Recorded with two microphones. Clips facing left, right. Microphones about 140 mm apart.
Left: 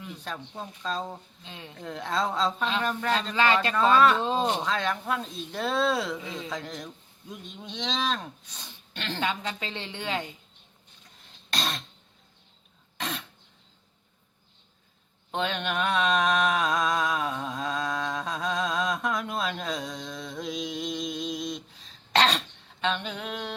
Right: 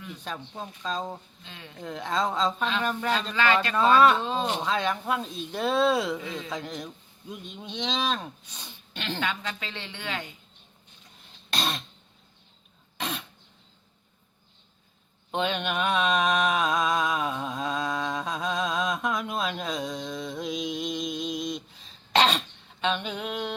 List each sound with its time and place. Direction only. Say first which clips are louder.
0.3 s speech: right 1 dB; centre (ahead or behind)
1.5 s a woman's voice: left 3 dB; 25° left (ahead or behind)
1.8 s speech: right 1 dB; centre (ahead or behind)
3.3 s a man's voice: left 1 dB; 30° left (ahead or behind)
3.8 s speech: right 2 dB; 15° right (ahead or behind)
4.2 s a woman's voice: left 2 dB; 30° left (ahead or behind)
4.6 s speech: right 1 dB; 10° right (ahead or behind)
6.1 s a woman's voice: right 1 dB; 25° left (ahead or behind)
6.5 s speech: right 1 dB; 10° right (ahead or behind)
9.2 s a woman's voice: left 5 dB; 30° left (ahead or behind)
11.5 s cough: right 2 dB; 10° right (ahead or behind)
13.0 s throat clearing: right 1 dB; 5° right (ahead or behind)
15.3 s mantra: right 1 dB; 5° right (ahead or behind)
22.1 s throat clearing: right 1 dB; 5° right (ahead or behind)